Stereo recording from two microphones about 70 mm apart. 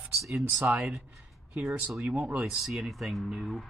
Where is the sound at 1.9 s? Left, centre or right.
Centre.